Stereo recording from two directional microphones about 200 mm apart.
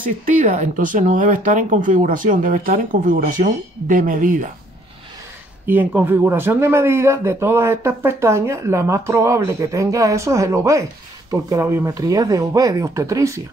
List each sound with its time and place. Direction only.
0.2 s speech: 40° right (ahead or behind)
5.7 s a man's voice: 10° right (ahead or behind)